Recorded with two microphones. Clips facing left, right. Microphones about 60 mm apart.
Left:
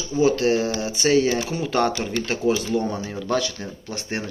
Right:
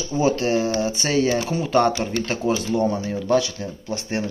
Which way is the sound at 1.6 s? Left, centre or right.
Centre.